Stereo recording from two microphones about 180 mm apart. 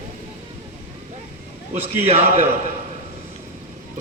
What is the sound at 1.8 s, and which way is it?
Speech, 35° right (ahead or behind).